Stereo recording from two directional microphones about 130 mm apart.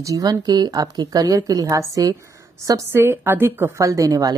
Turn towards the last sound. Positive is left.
turn(degrees=-30)  # may be behind; listen again after turning